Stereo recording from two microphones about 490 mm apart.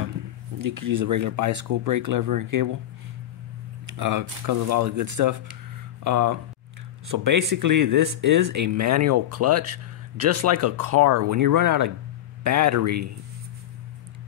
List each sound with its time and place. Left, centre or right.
0.6 s speech: right
3.9 s speech: right